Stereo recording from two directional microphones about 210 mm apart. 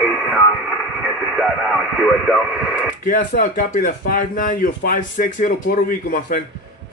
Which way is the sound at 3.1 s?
40° left (ahead or behind).